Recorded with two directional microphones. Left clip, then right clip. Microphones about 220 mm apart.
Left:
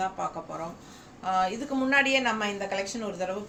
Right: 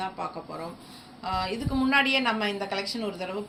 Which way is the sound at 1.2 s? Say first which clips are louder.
Left 3 dB; 20° left (ahead or behind).